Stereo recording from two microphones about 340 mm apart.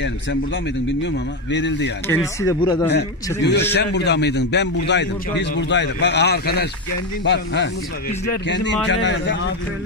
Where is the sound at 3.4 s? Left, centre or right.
Left.